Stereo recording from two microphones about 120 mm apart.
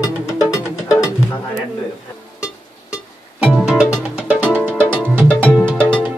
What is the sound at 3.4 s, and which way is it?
Music, 5° right (ahead or behind).